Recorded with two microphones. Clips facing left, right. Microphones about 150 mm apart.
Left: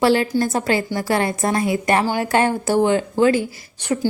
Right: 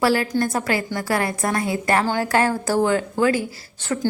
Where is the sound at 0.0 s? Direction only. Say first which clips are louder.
Left 3 dB; 25° left (ahead or behind).